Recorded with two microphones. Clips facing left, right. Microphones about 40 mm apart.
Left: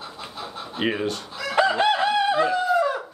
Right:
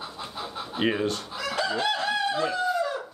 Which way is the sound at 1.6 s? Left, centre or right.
Left.